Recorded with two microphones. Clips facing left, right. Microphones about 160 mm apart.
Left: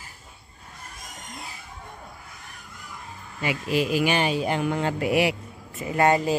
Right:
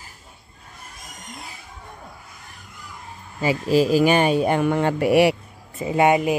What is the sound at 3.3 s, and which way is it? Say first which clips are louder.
Speech: right 6 dB; 35° right (ahead or behind).